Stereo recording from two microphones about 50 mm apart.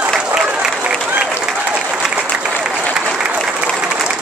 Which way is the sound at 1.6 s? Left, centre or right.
Right.